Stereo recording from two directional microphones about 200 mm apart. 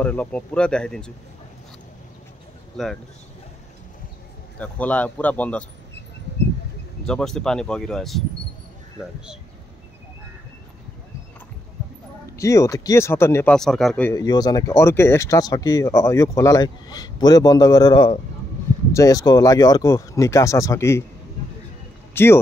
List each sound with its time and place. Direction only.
0.0 s speech: 5° left (ahead or behind)
4.6 s speech: 5° left (ahead or behind)
7.1 s speech: centre (ahead or behind)
12.4 s speech: 15° left (ahead or behind)
14.1 s speech: 20° left (ahead or behind)
22.1 s speech: 10° left (ahead or behind)